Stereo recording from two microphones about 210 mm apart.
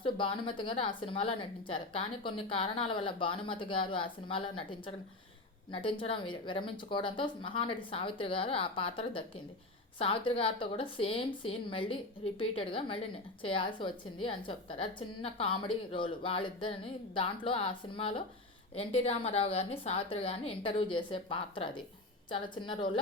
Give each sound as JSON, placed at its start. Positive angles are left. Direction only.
{"t": 0.0, "sound": "a woman's voice", "side_deg": 25}